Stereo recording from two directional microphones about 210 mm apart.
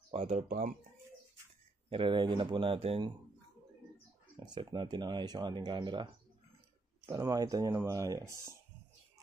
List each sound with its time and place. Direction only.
0.1 s speech: 30° right (ahead or behind)
1.9 s speech: 25° right (ahead or behind)
4.4 s speech: 20° right (ahead or behind)
7.1 s speech: 15° right (ahead or behind)